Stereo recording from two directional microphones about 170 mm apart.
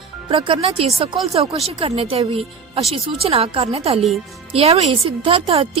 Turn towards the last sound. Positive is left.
turn(degrees=-35)  # may be behind; listen again after turning